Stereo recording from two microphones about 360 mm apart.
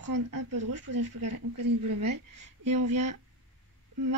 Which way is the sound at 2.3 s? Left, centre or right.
Centre.